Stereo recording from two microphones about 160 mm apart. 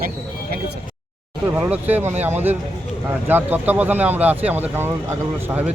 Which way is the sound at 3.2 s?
10° right (ahead or behind).